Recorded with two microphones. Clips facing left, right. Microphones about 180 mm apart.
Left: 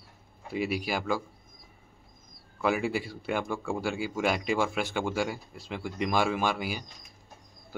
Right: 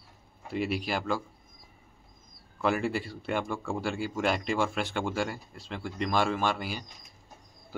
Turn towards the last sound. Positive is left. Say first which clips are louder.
# left 1 dB
turn(degrees=10)  # may be behind; listen again after turning